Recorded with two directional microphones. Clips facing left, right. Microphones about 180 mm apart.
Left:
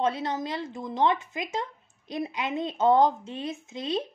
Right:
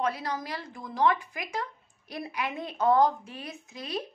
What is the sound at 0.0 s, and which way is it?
Speech, 25° left (ahead or behind).